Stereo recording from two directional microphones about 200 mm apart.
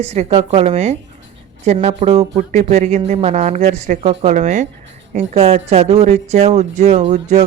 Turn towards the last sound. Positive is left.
turn(degrees=-35)  # may be behind; listen again after turning